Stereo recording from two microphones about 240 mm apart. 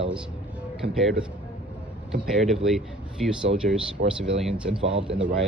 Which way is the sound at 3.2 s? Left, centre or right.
Centre.